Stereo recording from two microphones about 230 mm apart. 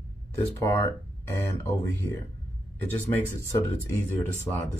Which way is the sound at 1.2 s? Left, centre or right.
Centre.